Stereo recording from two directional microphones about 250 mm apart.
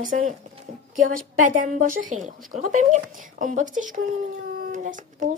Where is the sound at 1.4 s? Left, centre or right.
Right.